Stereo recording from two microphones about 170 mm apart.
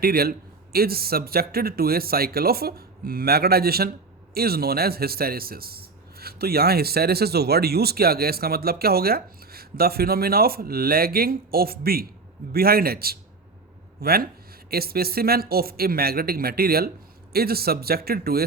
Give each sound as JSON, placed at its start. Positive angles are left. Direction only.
{"t": 0.0, "sound": "speech", "side_deg": -65}